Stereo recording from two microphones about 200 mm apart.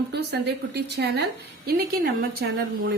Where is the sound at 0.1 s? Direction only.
55° right (ahead or behind).